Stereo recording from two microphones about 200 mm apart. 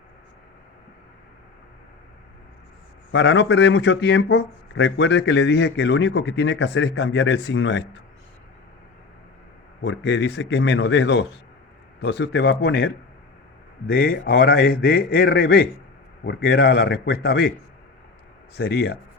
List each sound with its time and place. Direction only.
3.1 s speech: 65° left (ahead or behind)
9.8 s speech: 60° left (ahead or behind)
13.9 s a man's voice: 50° left (ahead or behind)
18.5 s a man's voice: 55° left (ahead or behind)